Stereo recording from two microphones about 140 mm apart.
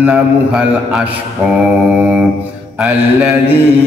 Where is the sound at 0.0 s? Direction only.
10° right (ahead or behind).